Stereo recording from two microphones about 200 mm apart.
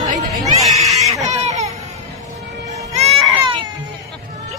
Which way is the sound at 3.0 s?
30° right (ahead or behind).